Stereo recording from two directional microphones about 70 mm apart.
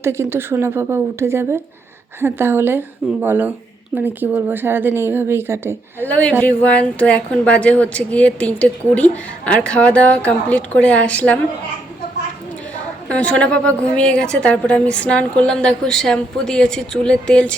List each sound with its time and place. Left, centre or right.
0.0 s a woman's voice: right
6.1 s a woman's voice: left
13.1 s a woman's voice: centre